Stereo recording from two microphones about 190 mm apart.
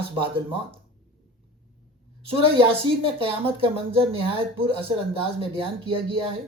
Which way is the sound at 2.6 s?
30° right (ahead or behind).